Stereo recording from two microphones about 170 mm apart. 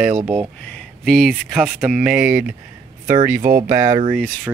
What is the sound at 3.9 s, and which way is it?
Speech, 25° right (ahead or behind).